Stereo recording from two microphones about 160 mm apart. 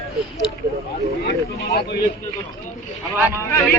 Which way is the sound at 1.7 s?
85° left.